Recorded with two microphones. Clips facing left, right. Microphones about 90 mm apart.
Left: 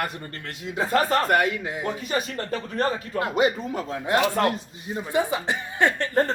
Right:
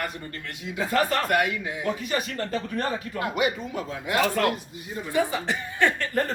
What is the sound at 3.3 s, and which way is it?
Speech, 35° left (ahead or behind).